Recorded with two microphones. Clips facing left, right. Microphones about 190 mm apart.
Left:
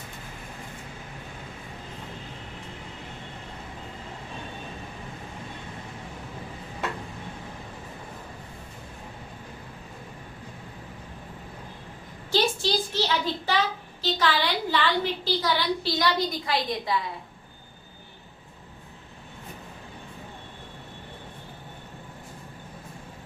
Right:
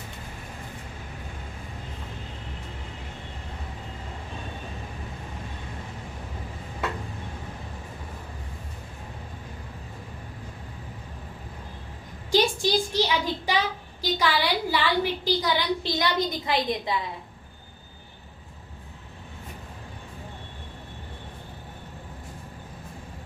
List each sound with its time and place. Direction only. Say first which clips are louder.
12.3 s a child's voice: right 2 dB; 15° right (ahead or behind)